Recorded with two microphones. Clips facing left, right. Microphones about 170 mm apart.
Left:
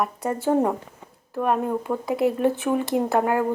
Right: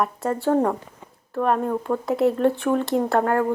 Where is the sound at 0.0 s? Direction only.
Centre (ahead or behind).